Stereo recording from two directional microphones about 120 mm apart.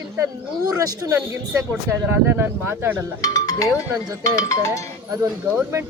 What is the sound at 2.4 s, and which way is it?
Speech, 20° right (ahead or behind).